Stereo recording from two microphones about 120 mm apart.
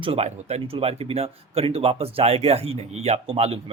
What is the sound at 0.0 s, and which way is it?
Speech, 55° right (ahead or behind).